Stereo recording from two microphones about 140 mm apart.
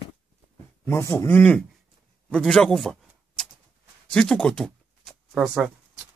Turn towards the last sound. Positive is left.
turn(degrees=0)  # may be behind; listen again after turning